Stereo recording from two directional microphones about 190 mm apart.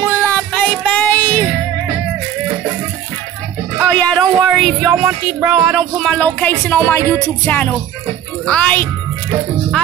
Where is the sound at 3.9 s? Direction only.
5° left (ahead or behind).